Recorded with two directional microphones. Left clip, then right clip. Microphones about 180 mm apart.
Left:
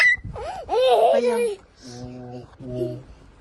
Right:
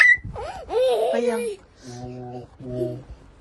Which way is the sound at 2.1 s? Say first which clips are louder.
Right 2 dB; centre (ahead or behind).